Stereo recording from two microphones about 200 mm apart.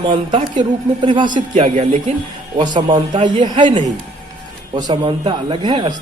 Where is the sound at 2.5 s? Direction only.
20° right (ahead or behind).